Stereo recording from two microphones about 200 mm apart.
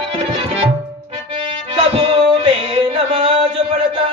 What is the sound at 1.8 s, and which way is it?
Male singing, 30° right (ahead or behind).